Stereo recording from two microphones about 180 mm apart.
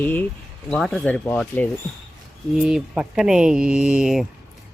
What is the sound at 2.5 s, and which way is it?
Speech, 5° right (ahead or behind).